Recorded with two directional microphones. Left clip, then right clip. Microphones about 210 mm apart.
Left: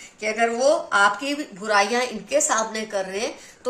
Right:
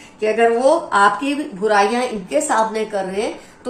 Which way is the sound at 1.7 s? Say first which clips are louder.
Right 4 dB; 45° left (ahead or behind).